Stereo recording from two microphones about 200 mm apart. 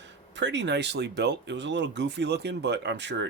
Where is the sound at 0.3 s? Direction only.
60° right (ahead or behind).